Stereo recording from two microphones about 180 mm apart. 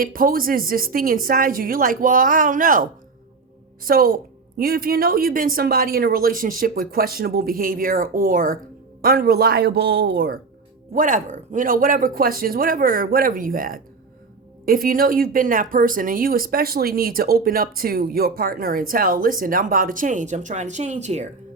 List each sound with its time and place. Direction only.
0.0 s speech: 50° right (ahead or behind)
3.8 s a man's voice: 55° right (ahead or behind)
10.9 s speech: 45° right (ahead or behind)